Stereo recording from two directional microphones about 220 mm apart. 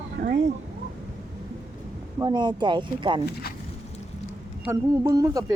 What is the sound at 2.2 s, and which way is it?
Speech, 20° right (ahead or behind).